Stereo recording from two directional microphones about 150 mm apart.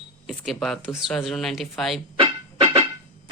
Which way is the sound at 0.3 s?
Centre (ahead or behind).